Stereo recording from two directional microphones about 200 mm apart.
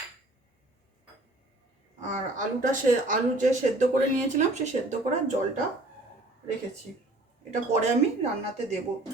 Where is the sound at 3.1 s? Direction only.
40° right (ahead or behind).